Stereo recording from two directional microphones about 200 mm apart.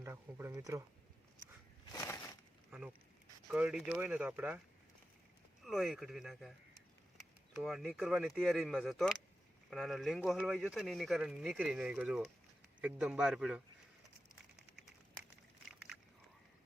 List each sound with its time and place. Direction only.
0.0 s speech: 10° right (ahead or behind)
1.9 s a sound: 15° left (ahead or behind)
3.5 s speech: 5° right (ahead or behind)
5.6 s speech: centre (ahead or behind)